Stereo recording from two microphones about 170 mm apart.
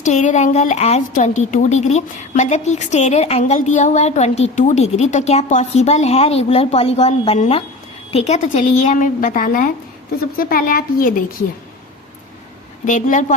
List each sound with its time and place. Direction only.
0.0 s a woman's voice: 45° left (ahead or behind)
12.8 s speech: 50° left (ahead or behind)